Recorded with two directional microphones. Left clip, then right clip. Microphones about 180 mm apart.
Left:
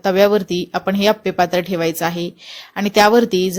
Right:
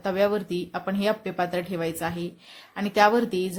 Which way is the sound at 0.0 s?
40° left (ahead or behind).